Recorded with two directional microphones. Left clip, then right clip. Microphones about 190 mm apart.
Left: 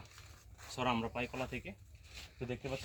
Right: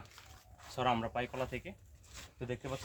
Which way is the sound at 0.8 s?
10° right (ahead or behind).